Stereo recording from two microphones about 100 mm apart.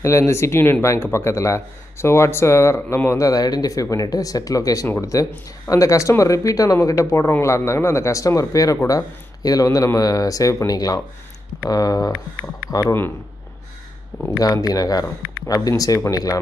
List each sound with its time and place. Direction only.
0.0 s a man's voice: 30° left (ahead or behind)
12.8 s a man's voice: 20° left (ahead or behind)
14.4 s speech: 40° left (ahead or behind)